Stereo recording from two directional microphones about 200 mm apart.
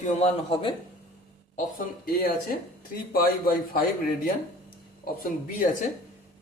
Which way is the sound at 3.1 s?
45° left (ahead or behind).